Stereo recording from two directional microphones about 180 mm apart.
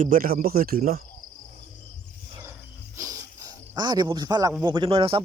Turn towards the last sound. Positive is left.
turn(degrees=-30)  # may be behind; listen again after turning